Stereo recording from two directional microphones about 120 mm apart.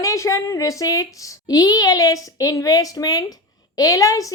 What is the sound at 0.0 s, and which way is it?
A woman's voice, 25° left (ahead or behind).